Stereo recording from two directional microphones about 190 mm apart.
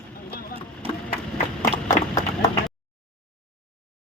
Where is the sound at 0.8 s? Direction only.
30° right (ahead or behind).